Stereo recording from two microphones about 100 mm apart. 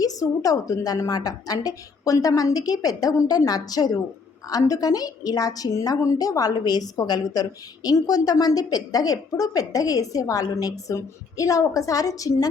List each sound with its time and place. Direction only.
0.0 s a woman's voice: 35° left (ahead or behind)